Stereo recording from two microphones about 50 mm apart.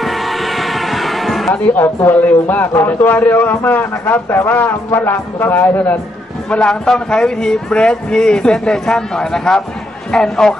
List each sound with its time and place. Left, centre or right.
0.0 s music: centre
1.5 s a man's voice: left
6.5 s speech: centre